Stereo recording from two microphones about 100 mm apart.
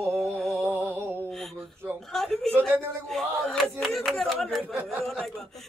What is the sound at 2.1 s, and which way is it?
A woman's voice, 5° left (ahead or behind).